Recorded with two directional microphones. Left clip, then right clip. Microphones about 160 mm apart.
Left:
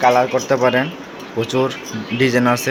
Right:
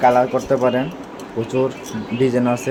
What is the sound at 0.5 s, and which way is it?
Speech, 5° left (ahead or behind).